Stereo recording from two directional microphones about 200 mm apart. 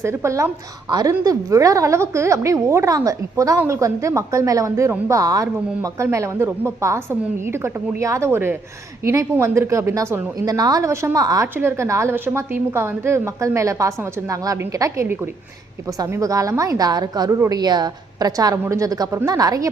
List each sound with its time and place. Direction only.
0.0 s a woman's voice: 15° right (ahead or behind)